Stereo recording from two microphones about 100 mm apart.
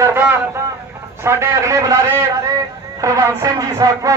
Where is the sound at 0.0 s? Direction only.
25° right (ahead or behind).